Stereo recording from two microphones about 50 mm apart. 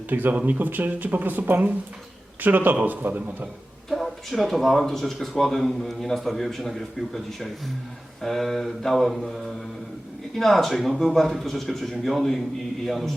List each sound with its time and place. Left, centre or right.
0.1 s speech: right
3.8 s speech: centre